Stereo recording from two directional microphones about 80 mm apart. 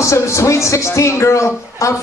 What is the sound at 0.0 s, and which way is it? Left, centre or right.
A man's voice, left.